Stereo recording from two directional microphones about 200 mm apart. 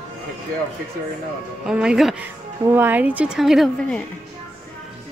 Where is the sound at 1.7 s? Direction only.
5° right (ahead or behind).